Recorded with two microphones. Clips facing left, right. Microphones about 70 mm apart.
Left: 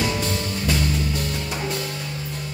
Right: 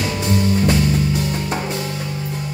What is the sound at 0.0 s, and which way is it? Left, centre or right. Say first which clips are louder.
Music: right 5 dB; centre.